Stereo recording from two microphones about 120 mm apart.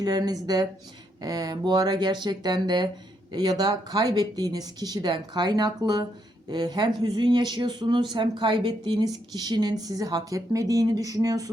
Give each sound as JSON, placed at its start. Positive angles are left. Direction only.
{"t": 0.0, "sound": "speech", "side_deg": -35}